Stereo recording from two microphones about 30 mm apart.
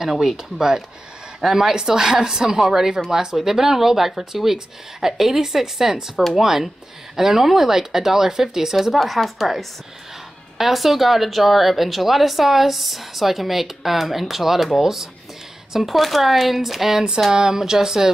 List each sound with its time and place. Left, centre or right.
0.1 s speech: centre
0.4 s a woman's voice: centre
1.4 s speech: centre
1.8 s a woman's voice: centre
8.8 s a woman's voice: centre
17.3 s a woman's voice: right